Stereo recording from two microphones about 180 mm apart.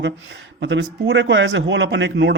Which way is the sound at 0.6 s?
90° right.